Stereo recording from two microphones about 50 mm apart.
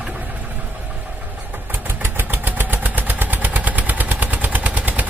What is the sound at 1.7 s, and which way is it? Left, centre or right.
Vehicle, right.